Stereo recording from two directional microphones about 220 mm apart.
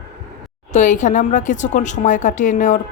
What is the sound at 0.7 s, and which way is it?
Speech, 35° left (ahead or behind).